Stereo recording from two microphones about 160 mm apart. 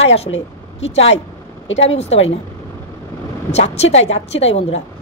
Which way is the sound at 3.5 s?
40° left (ahead or behind).